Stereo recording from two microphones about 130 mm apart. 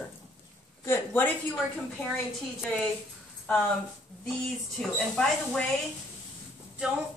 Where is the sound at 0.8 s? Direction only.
15° left (ahead or behind).